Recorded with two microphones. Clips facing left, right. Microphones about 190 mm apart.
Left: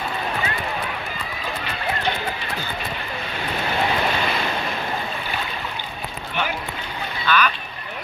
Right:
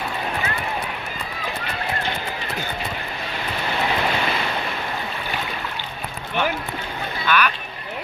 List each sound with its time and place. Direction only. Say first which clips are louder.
7.2 s speech: even; 10° right (ahead or behind)